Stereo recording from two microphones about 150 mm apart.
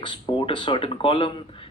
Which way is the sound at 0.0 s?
35° left (ahead or behind).